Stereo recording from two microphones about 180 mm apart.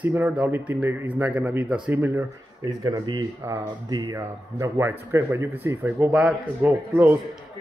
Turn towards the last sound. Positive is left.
turn(degrees=-10)  # may be behind; listen again after turning